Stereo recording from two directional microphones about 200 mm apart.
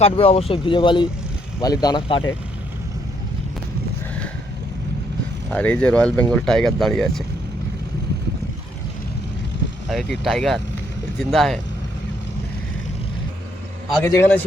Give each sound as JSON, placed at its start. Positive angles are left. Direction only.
{"t": 0.0, "sound": "speech", "side_deg": 30}
{"t": 5.5, "sound": "speech", "side_deg": 5}
{"t": 9.9, "sound": "speech", "side_deg": 0}
{"t": 14.0, "sound": "a man's voice", "side_deg": 10}